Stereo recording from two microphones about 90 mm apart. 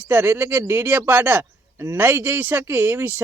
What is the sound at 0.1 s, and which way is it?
A man's voice, 25° right (ahead or behind).